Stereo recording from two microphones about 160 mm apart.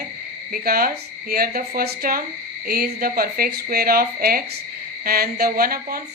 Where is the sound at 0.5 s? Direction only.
65° right (ahead or behind).